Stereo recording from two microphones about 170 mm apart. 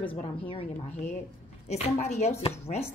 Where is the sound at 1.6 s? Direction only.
40° left (ahead or behind).